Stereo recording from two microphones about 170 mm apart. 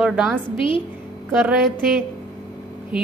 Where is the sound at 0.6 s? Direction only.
30° left (ahead or behind).